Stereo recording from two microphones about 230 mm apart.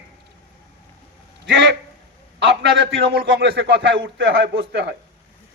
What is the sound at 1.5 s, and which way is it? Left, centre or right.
A man's voice, right.